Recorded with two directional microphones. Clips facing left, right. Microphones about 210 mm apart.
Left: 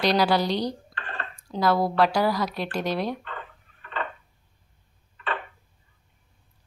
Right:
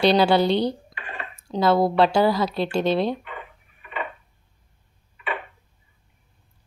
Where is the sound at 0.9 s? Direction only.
10° right (ahead or behind).